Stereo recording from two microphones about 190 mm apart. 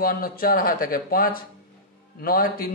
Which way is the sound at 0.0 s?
50° left (ahead or behind).